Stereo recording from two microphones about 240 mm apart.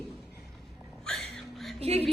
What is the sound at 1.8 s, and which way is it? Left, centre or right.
Speech, right.